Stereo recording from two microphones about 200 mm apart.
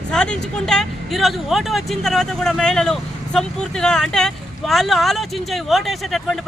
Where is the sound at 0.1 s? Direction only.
5° left (ahead or behind).